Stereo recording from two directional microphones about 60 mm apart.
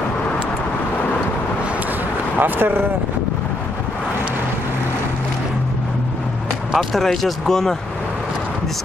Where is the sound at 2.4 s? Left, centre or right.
Right.